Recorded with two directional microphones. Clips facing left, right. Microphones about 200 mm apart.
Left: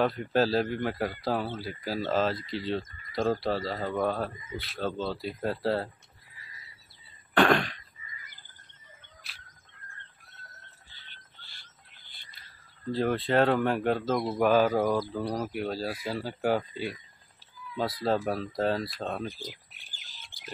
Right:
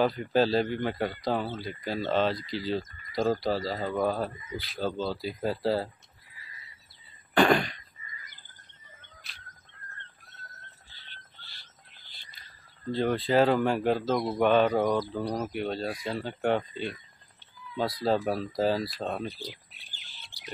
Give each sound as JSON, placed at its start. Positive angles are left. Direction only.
{"t": 0.0, "sound": "speech", "side_deg": 0}
{"t": 7.3, "sound": "throat clearing", "side_deg": 0}
{"t": 10.9, "sound": "music", "side_deg": 50}
{"t": 12.9, "sound": "speech", "side_deg": 0}
{"t": 19.3, "sound": "bird", "side_deg": 45}